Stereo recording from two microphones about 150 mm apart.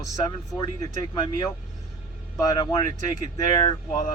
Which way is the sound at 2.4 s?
25° left (ahead or behind).